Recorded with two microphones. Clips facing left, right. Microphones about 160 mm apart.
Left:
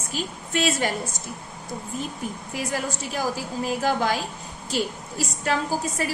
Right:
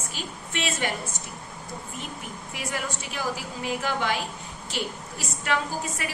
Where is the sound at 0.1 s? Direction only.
40° left (ahead or behind).